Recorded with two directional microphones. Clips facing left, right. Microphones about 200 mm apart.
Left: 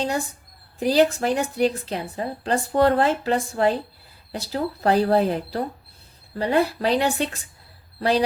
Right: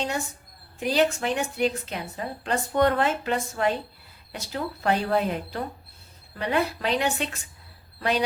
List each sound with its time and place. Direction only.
0.0 s a woman's voice: 35° left (ahead or behind)